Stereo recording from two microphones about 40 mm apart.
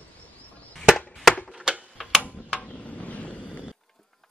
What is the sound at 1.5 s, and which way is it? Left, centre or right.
Tick-tock, right.